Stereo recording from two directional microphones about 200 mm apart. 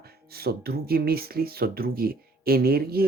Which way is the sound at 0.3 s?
50° right (ahead or behind).